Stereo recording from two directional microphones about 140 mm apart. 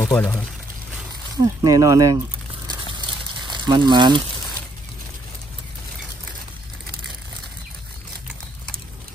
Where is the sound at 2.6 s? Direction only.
30° right (ahead or behind).